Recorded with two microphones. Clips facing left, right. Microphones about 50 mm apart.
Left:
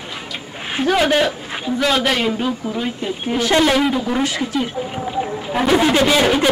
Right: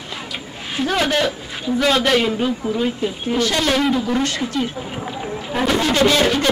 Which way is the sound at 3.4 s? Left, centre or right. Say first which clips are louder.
Left 4 dB; centre.